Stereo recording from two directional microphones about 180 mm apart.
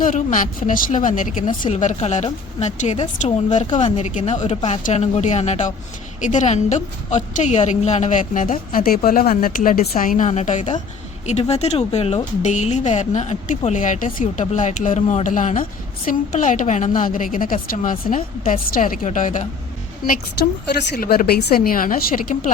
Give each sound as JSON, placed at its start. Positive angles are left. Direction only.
{"t": 0.0, "sound": "a woman's voice", "side_deg": 45}